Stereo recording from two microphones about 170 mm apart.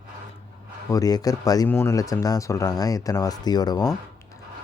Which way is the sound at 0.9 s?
20° left (ahead or behind).